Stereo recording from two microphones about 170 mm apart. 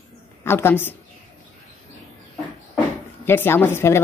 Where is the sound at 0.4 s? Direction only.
15° left (ahead or behind).